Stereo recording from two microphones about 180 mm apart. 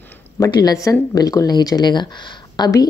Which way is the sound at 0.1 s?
20° left (ahead or behind).